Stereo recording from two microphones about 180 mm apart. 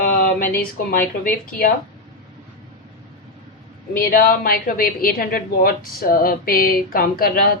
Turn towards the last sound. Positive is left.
turn(degrees=55)  # may be behind; listen again after turning